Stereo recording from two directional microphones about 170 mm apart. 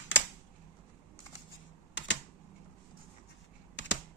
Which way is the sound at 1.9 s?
90° left.